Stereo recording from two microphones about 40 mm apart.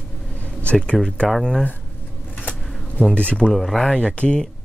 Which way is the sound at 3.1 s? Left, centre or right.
Left.